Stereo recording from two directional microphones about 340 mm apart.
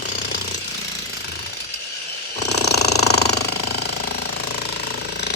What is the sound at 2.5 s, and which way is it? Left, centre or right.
Ratchet, left.